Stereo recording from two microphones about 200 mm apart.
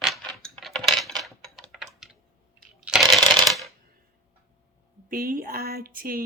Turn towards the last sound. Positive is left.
turn(degrees=-45)  # may be behind; listen again after turning